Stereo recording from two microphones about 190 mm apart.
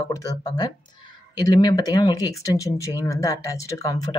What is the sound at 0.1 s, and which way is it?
Speech, 15° left (ahead or behind).